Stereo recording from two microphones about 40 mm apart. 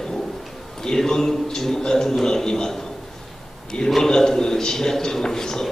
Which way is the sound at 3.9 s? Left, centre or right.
Centre.